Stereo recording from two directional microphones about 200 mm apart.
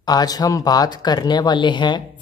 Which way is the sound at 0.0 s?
20° left (ahead or behind).